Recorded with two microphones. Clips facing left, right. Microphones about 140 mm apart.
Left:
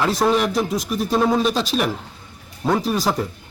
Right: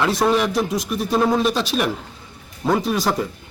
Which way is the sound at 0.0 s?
Centre (ahead or behind).